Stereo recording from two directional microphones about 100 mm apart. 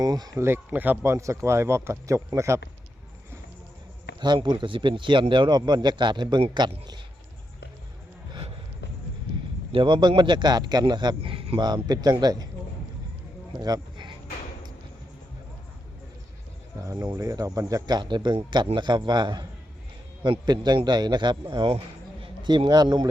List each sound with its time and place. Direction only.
0.0 s speech: 40° right (ahead or behind)
0.3 s speech: 25° right (ahead or behind)
4.4 s speech: 55° right (ahead or behind)
9.7 s speech: 50° right (ahead or behind)
11.2 s speech: 65° right (ahead or behind)
11.6 s speech: 45° right (ahead or behind)
13.6 s a sound: 40° right (ahead or behind)
16.8 s a man's voice: 35° right (ahead or behind)